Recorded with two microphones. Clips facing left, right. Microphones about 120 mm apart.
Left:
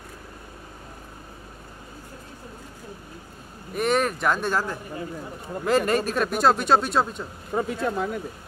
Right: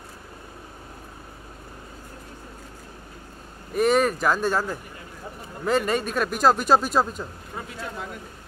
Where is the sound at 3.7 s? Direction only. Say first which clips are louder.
Right 3 dB; centre (ahead or behind).